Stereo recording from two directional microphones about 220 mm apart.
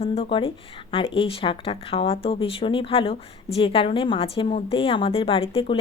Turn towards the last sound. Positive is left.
turn(degrees=25)  # may be behind; listen again after turning